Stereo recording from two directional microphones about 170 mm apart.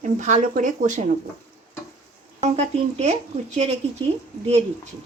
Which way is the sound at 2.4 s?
40° right (ahead or behind).